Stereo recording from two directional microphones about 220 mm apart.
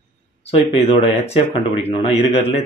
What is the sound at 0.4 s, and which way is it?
Speech, 25° left (ahead or behind).